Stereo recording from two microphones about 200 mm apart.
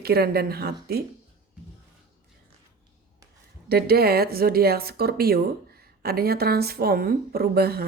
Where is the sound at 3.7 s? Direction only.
50° right (ahead or behind).